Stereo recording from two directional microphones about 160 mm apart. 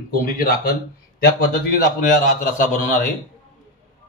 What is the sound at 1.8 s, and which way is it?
A man's voice, 55° left (ahead or behind).